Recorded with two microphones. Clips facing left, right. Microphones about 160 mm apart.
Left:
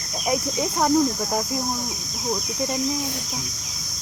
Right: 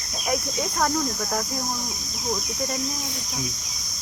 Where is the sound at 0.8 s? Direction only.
20° left (ahead or behind).